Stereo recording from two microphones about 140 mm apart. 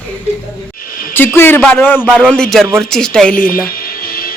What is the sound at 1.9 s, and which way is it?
Speech, 10° right (ahead or behind).